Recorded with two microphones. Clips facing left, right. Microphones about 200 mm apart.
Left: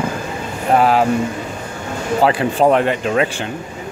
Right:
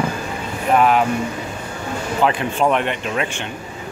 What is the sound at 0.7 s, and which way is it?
Speech, 35° left (ahead or behind).